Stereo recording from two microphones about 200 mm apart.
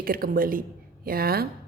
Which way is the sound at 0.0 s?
45° right (ahead or behind).